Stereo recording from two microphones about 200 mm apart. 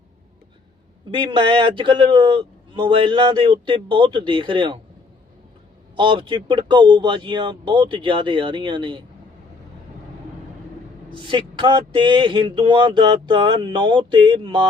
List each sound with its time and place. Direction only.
1.2 s a man's voice: 25° right (ahead or behind)
6.0 s a man's voice: 25° right (ahead or behind)
11.3 s a man's voice: 25° right (ahead or behind)